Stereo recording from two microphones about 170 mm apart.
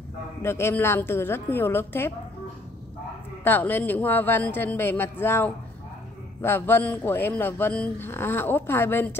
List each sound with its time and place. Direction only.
0.4 s a man's voice: 15° left (ahead or behind)
3.4 s a man's voice: 10° left (ahead or behind)